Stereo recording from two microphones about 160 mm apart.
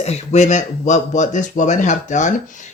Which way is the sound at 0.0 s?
40° left (ahead or behind).